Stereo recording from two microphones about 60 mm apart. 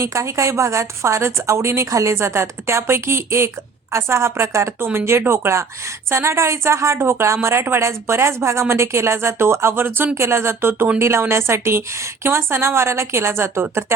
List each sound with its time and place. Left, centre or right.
0.0 s a woman's voice: right